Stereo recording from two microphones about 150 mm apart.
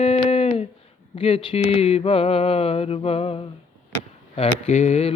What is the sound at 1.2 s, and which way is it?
Mantra, 40° left (ahead or behind).